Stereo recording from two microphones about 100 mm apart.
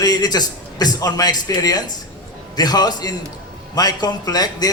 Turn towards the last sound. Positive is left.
turn(degrees=40)  # may be behind; listen again after turning